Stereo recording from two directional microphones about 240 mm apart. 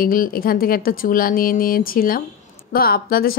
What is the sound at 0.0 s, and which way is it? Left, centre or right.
A woman's voice, left.